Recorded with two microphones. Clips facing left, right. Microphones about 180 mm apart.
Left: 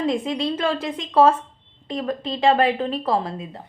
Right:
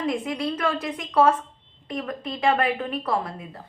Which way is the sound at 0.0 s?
25° left (ahead or behind).